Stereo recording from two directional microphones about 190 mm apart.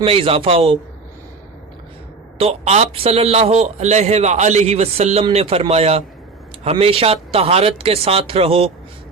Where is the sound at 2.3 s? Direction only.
35° right (ahead or behind).